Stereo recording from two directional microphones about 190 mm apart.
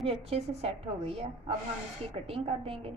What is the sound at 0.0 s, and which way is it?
A woman's voice, 30° right (ahead or behind).